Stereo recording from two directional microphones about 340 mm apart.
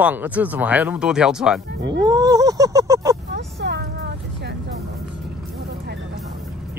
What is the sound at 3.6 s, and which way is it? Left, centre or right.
Speech, right.